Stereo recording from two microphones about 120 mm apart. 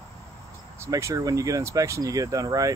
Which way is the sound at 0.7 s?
25° right (ahead or behind).